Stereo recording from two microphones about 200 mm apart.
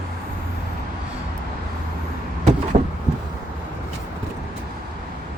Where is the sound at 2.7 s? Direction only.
35° right (ahead or behind).